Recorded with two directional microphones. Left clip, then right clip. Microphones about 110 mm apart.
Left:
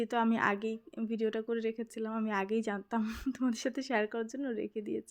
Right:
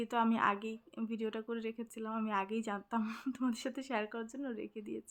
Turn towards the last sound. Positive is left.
turn(degrees=40)  # may be behind; listen again after turning